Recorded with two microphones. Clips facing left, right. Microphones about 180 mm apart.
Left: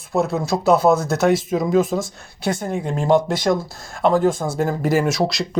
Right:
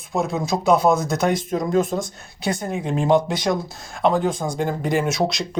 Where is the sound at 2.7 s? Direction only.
15° right (ahead or behind).